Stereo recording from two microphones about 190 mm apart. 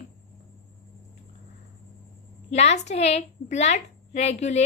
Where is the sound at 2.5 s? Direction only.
35° left (ahead or behind).